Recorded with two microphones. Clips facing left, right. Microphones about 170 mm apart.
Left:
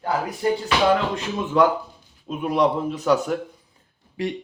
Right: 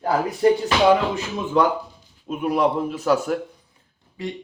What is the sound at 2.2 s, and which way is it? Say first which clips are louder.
A man's voice: even; centre (ahead or behind).